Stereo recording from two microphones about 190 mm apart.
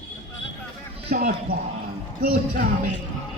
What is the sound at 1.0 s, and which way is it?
Speech, 50° right (ahead or behind).